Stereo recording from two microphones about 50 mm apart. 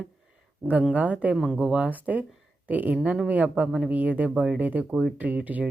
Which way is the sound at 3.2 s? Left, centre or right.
Right.